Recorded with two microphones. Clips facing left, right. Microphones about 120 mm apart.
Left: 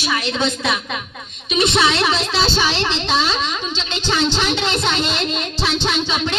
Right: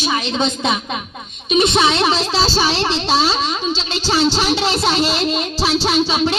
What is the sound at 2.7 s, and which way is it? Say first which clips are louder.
Speech: right 3 dB; 15° right (ahead or behind).